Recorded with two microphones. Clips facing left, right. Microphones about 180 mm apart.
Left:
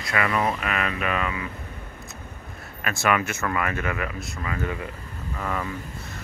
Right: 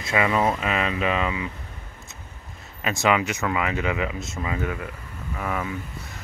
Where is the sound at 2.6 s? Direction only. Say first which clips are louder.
Right 2 dB; 20° right (ahead or behind).